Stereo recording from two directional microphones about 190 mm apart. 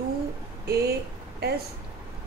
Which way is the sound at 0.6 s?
55° right (ahead or behind).